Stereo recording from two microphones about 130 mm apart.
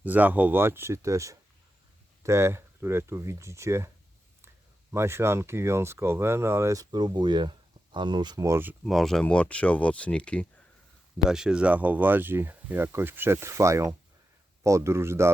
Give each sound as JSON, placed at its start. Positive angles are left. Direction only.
{"t": 0.0, "sound": "speech", "side_deg": -10}
{"t": 4.9, "sound": "speech", "side_deg": -20}
{"t": 6.9, "sound": "speech", "side_deg": -35}
{"t": 8.8, "sound": "speech", "side_deg": 0}
{"t": 11.3, "sound": "speech", "side_deg": -5}